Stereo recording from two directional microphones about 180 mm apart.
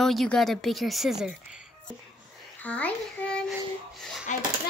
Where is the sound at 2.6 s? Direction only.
10° left (ahead or behind).